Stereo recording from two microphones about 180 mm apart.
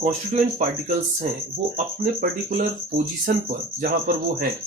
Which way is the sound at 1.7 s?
40° right (ahead or behind).